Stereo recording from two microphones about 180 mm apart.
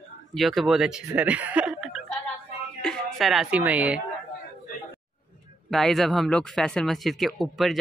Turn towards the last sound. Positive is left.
turn(degrees=0)  # may be behind; listen again after turning